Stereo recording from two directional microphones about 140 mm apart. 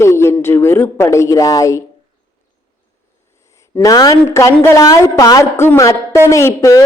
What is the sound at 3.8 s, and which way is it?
A woman's voice, 25° left (ahead or behind).